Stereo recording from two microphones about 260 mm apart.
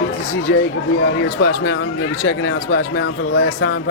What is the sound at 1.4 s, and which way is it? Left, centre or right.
Speech, left.